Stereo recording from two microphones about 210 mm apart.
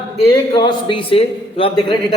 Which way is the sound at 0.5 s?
25° left (ahead or behind).